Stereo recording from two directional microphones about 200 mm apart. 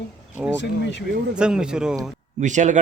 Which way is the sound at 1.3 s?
5° right (ahead or behind).